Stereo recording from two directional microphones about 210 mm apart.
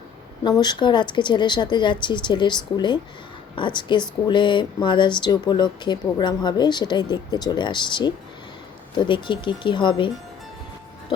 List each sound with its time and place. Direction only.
0.4 s speech: 20° left (ahead or behind)